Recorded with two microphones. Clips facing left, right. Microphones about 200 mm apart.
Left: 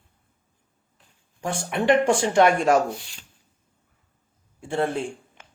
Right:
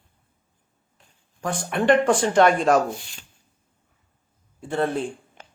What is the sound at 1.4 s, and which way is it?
Speech, 25° left (ahead or behind).